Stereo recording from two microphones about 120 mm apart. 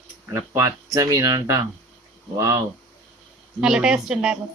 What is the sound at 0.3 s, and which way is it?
Speech, 25° right (ahead or behind).